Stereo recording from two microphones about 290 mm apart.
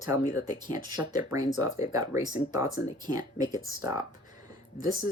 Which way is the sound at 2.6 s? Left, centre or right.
Left.